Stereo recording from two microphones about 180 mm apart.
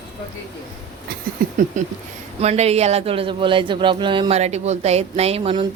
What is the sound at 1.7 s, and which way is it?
A woman's voice, 45° right (ahead or behind).